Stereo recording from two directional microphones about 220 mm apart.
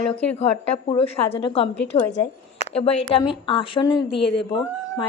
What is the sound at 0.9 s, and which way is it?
Speech, 25° left (ahead or behind).